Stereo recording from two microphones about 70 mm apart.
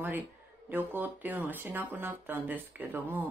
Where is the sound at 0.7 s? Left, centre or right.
Right.